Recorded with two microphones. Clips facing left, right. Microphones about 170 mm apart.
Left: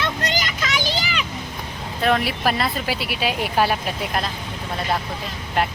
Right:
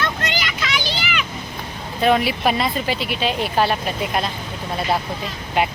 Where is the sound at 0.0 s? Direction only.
40° left (ahead or behind).